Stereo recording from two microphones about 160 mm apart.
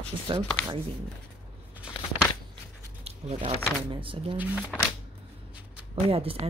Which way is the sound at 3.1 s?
40° right (ahead or behind).